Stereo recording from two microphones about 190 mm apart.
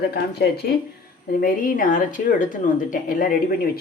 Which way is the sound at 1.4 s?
45° left (ahead or behind).